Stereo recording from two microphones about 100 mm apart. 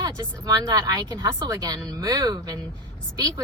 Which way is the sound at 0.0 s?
35° right (ahead or behind).